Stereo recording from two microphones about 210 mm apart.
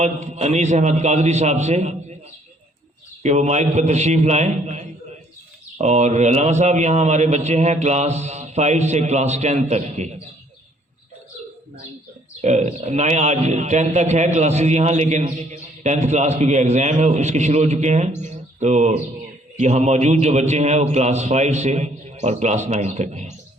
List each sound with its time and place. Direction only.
0.0 s a man's voice: 35° right (ahead or behind)
3.2 s a man's voice: 35° right (ahead or behind)
12.4 s a man's voice: 30° right (ahead or behind)